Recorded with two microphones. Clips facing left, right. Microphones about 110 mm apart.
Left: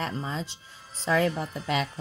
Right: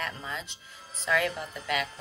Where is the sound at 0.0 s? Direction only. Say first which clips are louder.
Left 4 dB; 30° left (ahead or behind).